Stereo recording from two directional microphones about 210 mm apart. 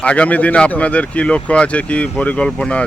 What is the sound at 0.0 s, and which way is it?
Speech, 5° left (ahead or behind).